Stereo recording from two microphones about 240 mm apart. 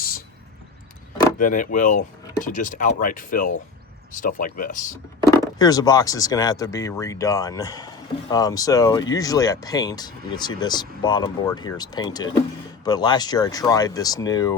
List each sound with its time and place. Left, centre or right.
1.4 s speech: left
5.5 s speech: centre